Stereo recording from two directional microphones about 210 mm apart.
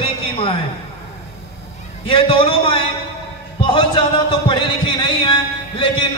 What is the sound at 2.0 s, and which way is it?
Speech, 25° left (ahead or behind).